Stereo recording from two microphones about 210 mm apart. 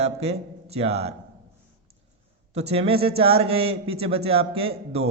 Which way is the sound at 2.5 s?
30° right (ahead or behind).